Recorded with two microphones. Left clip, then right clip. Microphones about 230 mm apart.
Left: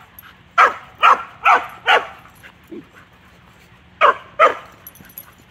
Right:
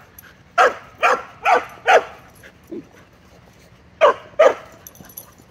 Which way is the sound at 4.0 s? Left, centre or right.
Centre.